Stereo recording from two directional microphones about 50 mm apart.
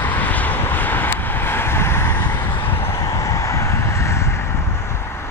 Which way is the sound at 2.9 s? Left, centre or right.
Left.